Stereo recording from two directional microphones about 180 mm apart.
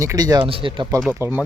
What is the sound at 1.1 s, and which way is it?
Speech, 15° right (ahead or behind).